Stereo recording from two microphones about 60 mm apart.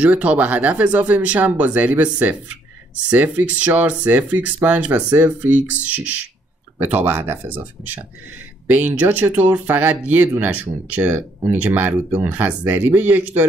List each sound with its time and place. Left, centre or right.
0.0 s speech: right